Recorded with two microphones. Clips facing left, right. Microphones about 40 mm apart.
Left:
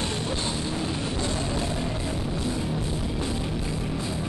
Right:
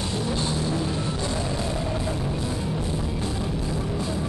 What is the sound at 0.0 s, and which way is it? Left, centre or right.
Music, left.